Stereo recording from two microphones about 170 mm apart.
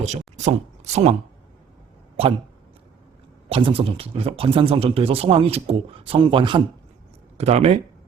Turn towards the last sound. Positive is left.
turn(degrees=-40)  # may be behind; listen again after turning